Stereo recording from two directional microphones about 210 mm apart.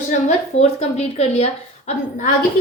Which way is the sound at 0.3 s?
30° left (ahead or behind).